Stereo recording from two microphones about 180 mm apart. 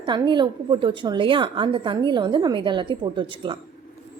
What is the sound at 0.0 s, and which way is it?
A woman's voice, 25° right (ahead or behind).